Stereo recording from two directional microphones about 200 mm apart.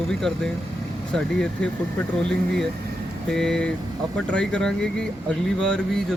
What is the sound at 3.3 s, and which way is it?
Speech, 5° left (ahead or behind).